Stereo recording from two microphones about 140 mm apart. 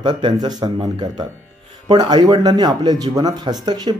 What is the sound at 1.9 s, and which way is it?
Speech, 30° right (ahead or behind).